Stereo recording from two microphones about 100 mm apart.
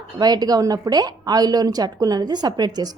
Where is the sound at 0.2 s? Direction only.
40° right (ahead or behind).